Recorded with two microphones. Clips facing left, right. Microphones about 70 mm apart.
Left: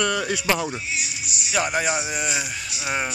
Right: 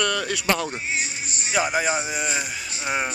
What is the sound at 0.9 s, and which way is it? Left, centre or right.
Music, right.